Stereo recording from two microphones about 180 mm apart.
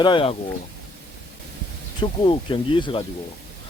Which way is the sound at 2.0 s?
30° left (ahead or behind).